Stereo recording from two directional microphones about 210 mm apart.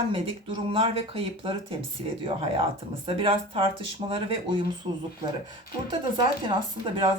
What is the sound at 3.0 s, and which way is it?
Speech, 25° right (ahead or behind).